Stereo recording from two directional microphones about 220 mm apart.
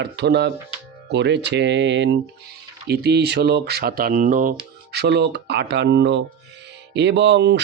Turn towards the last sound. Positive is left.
turn(degrees=-50)  # may be behind; listen again after turning